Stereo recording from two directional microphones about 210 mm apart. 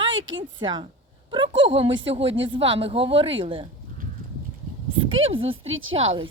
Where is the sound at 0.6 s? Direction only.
20° right (ahead or behind).